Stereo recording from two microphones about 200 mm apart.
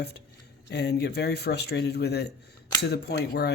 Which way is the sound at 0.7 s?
55° left (ahead or behind).